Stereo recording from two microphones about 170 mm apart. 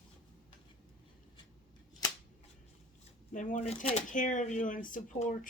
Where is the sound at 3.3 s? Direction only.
50° left (ahead or behind).